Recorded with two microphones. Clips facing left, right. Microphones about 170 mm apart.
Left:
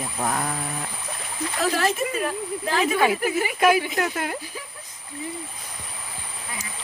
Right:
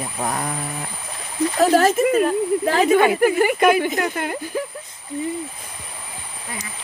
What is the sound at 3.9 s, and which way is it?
Speech, centre (ahead or behind).